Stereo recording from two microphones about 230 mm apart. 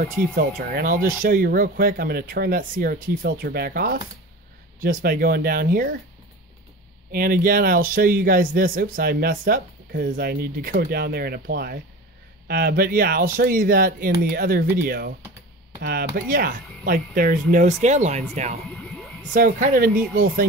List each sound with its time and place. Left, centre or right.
0.4 s speech: right
7.1 s speech: right